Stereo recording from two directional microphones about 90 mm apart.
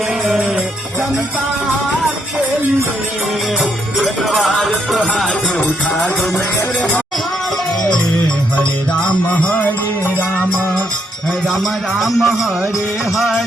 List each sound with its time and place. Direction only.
0.3 s music: 5° right (ahead or behind)
3.6 s music: centre (ahead or behind)
8.9 s music: 15° left (ahead or behind)
11.4 s speech: centre (ahead or behind)
13.1 s music: centre (ahead or behind)